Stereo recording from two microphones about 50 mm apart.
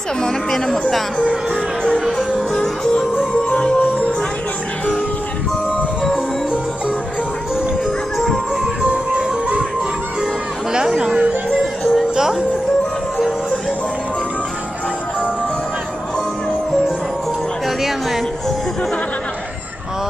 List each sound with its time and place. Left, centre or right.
0.2 s speech: centre
2.0 s music: centre
2.5 s music: centre
3.8 s music: left
8.8 s music: right
11.1 s music: right
11.6 s music: centre
12.2 s music: centre
17.6 s music: centre